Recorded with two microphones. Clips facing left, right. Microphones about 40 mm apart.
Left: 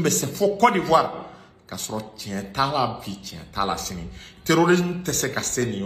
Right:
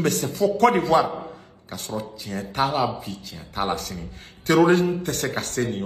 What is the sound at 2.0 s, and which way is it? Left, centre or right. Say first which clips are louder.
Speech: right 1 dB; right.